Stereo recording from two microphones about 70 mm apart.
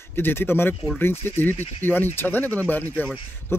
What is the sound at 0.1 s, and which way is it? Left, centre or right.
Speech, left.